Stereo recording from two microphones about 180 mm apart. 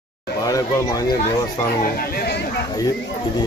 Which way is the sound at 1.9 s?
60° left (ahead or behind).